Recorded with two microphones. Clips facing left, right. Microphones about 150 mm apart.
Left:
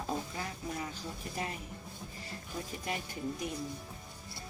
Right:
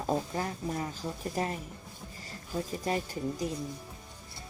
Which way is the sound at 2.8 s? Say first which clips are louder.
Right 5 dB; 40° right (ahead or behind).